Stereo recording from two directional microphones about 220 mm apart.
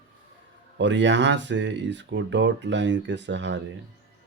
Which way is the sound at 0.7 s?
55° right (ahead or behind).